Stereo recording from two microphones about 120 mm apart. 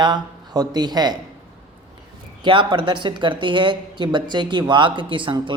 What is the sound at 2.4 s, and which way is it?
Speech, 45° right (ahead or behind).